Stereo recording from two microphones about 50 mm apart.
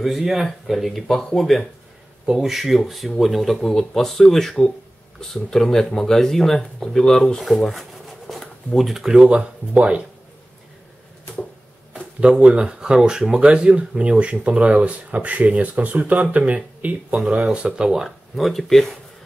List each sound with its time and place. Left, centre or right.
0.2 s speech: centre
9.3 s speech: right
11.9 s a sound: right
12.6 s speech: centre
17.6 s speech: centre
18.3 s speech: centre